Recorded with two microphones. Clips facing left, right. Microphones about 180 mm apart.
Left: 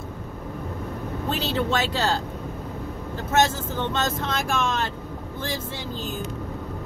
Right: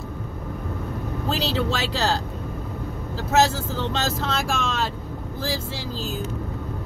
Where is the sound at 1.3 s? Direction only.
70° right (ahead or behind).